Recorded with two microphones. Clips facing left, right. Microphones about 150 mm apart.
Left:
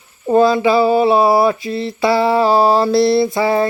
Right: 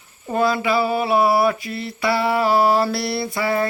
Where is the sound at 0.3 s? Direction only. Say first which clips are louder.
Left 8 dB; 30° left (ahead or behind).